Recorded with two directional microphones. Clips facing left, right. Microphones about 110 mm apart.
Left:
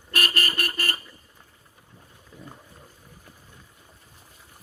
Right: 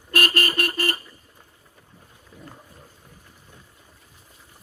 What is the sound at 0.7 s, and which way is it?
Vehicle, 20° right (ahead or behind).